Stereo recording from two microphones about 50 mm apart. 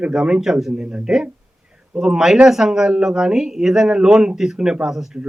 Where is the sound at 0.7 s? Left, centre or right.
Right.